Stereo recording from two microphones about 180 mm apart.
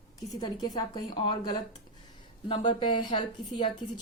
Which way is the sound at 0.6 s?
25° left (ahead or behind).